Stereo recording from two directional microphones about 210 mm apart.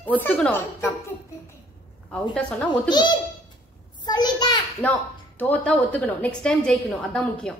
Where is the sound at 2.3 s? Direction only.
5° left (ahead or behind).